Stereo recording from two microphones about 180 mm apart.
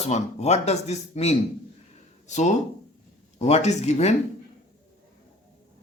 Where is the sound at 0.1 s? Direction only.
40° left (ahead or behind).